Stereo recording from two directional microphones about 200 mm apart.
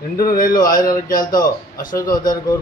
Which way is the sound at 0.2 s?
45° left (ahead or behind).